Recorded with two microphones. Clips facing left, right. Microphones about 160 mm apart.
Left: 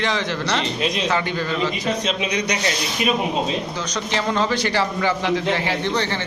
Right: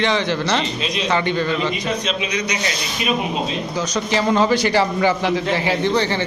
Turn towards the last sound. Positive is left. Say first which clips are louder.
# right 3 dB
turn(degrees=-15)  # may be behind; listen again after turning